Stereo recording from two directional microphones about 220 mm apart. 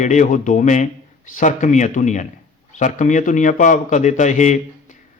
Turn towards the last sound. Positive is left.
turn(degrees=35)  # may be behind; listen again after turning